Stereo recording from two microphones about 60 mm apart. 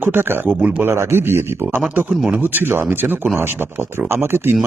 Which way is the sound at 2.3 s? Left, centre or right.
Right.